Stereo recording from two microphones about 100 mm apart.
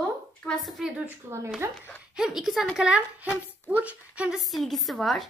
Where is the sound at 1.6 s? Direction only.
25° right (ahead or behind).